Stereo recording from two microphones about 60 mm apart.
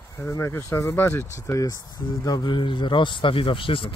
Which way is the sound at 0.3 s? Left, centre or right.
Left.